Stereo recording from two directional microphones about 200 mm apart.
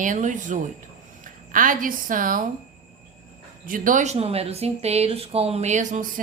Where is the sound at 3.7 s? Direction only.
45° right (ahead or behind).